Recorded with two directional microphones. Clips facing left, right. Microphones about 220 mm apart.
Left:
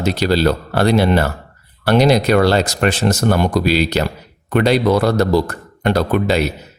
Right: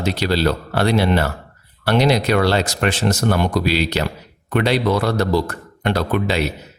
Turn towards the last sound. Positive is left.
turn(degrees=45)  # may be behind; listen again after turning